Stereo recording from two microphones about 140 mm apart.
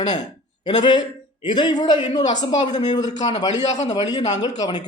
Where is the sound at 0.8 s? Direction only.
35° left (ahead or behind).